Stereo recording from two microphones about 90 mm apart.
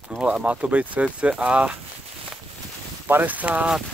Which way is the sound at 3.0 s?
20° right (ahead or behind).